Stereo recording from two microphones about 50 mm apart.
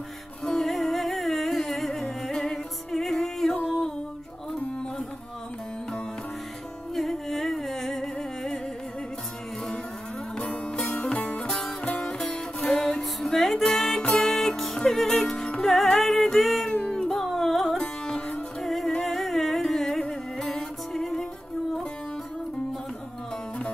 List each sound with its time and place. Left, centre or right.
0.5 s music: centre
3.5 s music: left
6.9 s music: centre
10.3 s music: left
10.8 s music: centre
11.1 s music: left
15.6 s music: centre
17.7 s music: centre
18.6 s music: centre